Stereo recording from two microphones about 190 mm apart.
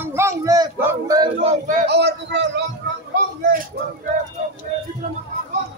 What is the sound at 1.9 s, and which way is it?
Speech, 60° right (ahead or behind).